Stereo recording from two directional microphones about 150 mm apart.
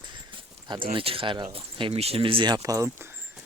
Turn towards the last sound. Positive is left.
turn(degrees=-20)  # may be behind; listen again after turning